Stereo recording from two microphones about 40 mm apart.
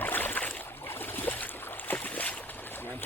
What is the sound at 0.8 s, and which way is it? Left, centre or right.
Boat, left.